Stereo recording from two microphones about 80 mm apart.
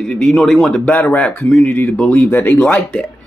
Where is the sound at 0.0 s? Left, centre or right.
Centre.